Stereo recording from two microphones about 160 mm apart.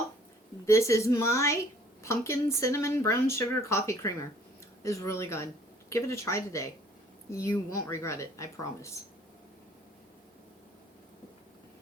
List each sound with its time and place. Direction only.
0.6 s a woman's voice: 20° left (ahead or behind)